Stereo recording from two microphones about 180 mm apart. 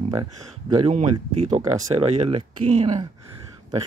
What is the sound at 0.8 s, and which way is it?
Speech, 35° right (ahead or behind).